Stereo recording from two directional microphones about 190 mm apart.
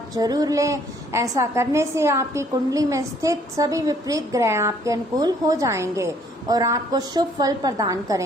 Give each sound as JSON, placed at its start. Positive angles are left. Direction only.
{"t": 0.1, "sound": "a woman's voice", "side_deg": -20}